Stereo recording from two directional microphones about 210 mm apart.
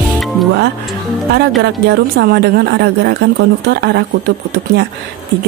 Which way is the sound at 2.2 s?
50° right (ahead or behind).